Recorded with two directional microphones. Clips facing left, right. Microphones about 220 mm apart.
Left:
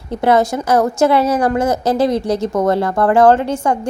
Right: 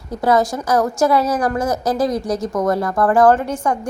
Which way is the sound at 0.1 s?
25° left (ahead or behind).